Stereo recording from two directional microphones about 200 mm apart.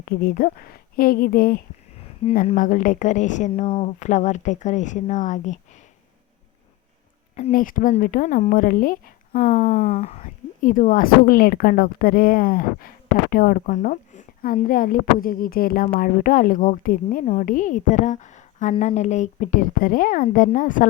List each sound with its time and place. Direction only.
0.0 s a woman's voice: 50° left (ahead or behind)
3.5 s a woman's voice: 25° left (ahead or behind)
7.3 s speech: 40° left (ahead or behind)
9.5 s a woman's voice: 30° left (ahead or behind)